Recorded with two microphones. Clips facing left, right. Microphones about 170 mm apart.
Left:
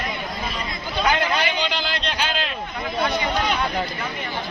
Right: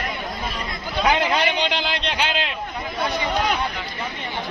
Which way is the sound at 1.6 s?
20° right (ahead or behind).